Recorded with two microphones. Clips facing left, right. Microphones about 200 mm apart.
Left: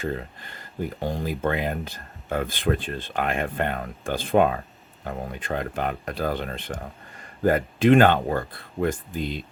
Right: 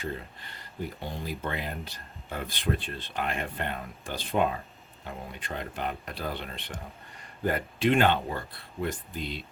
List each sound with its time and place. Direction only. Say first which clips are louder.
0.0 s speech: left 6 dB; 50° left (ahead or behind)
5.0 s speech: left 8 dB; 45° left (ahead or behind)